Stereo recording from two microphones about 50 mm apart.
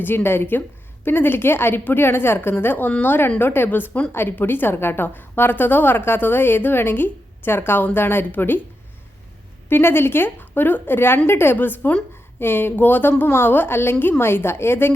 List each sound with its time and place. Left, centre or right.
0.0 s a woman's voice: left
9.6 s a woman's voice: left
11.5 s a woman's voice: left